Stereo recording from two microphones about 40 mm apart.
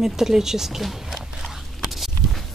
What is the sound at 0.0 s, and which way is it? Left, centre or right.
Speech, centre.